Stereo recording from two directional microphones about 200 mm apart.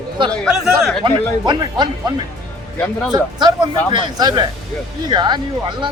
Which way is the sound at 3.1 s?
20° right (ahead or behind).